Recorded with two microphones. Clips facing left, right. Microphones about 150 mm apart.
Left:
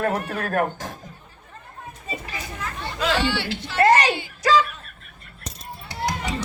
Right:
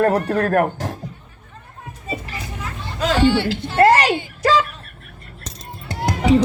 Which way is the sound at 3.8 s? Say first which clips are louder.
Right 2 dB; 30° right (ahead or behind).